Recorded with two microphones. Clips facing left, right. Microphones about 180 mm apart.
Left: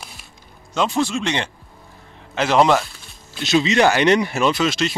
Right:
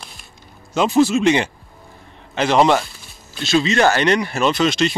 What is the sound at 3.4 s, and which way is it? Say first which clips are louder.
Speech: even; 20° left (ahead or behind).